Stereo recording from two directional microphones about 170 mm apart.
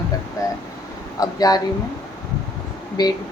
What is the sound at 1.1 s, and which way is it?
Speech, 20° left (ahead or behind).